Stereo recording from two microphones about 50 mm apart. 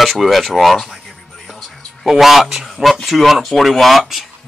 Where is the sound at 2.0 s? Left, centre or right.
Centre.